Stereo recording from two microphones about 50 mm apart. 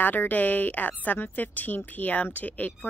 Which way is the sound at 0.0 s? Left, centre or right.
Left.